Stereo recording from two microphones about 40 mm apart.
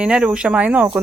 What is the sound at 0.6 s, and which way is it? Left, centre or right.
Speech, right.